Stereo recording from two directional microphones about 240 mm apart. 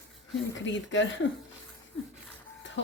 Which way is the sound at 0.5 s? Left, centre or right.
Left.